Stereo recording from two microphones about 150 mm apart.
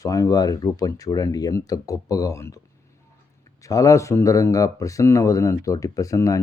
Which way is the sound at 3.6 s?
20° left (ahead or behind).